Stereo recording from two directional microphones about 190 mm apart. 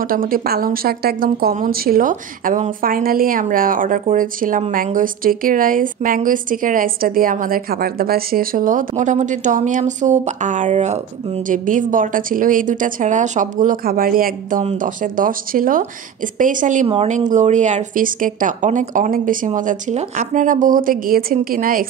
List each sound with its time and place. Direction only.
0.0 s speech: 50° right (ahead or behind)
16.8 s speech: 30° right (ahead or behind); by 21.8 s 50° right (ahead or behind)